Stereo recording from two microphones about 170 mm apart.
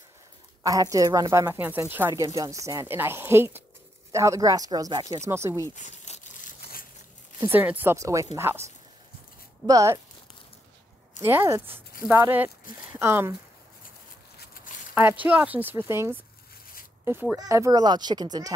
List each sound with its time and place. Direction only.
0.7 s speech: 20° right (ahead or behind)
5.8 s crumpling: 45° left (ahead or behind)
7.3 s speech: 10° right (ahead or behind)
9.7 s speech: 20° right (ahead or behind)
11.1 s speech: 15° right (ahead or behind)
14.4 s a sound: 55° left (ahead or behind)
15.0 s speech: 10° right (ahead or behind)